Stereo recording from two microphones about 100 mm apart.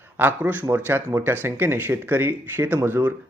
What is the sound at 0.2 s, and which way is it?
Speech, 20° right (ahead or behind).